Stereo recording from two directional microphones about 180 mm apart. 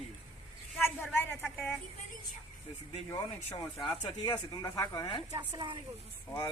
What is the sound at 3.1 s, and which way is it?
Speech, 20° left (ahead or behind).